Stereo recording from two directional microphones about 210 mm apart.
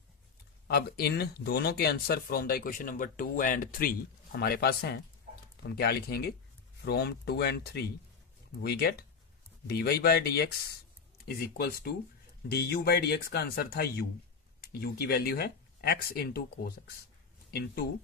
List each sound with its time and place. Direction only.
0.7 s speech: 50° left (ahead or behind)
11.5 s speech: 45° left (ahead or behind)